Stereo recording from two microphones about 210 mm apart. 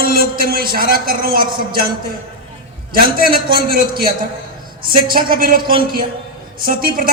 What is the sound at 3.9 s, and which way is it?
A man's voice, 45° right (ahead or behind).